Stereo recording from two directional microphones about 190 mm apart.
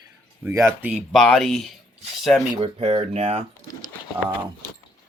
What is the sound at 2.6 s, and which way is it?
Speech, 30° right (ahead or behind).